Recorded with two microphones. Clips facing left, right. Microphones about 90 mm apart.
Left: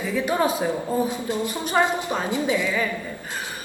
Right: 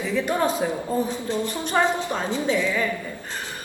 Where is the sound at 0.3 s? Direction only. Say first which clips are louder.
Left 2 dB; 10° left (ahead or behind).